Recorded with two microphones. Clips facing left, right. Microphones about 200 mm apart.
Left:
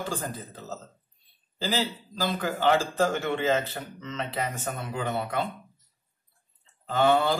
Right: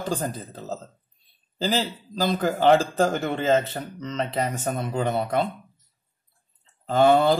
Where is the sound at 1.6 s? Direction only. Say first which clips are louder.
Right 3 dB; 40° right (ahead or behind).